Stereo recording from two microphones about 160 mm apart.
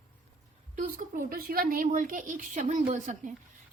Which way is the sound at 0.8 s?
60° right (ahead or behind).